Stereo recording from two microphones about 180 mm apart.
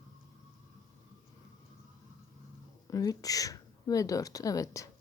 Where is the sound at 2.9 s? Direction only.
20° left (ahead or behind).